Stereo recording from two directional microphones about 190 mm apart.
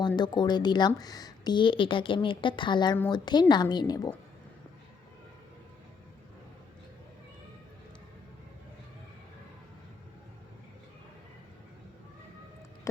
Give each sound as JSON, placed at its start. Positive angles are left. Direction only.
{"t": 0.2, "sound": "a woman's voice", "side_deg": 20}